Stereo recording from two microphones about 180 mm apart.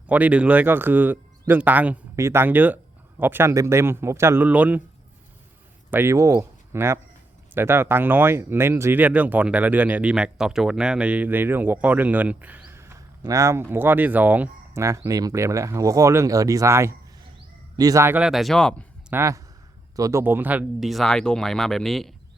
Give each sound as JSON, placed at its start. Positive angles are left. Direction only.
{"t": 0.1, "sound": "speech", "side_deg": -10}
{"t": 5.9, "sound": "speech", "side_deg": -15}
{"t": 19.1, "sound": "speech", "side_deg": -15}